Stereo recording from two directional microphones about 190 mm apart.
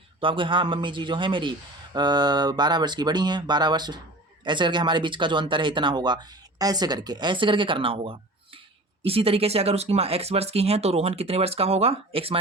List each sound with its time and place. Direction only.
0.2 s a man's voice: 25° right (ahead or behind)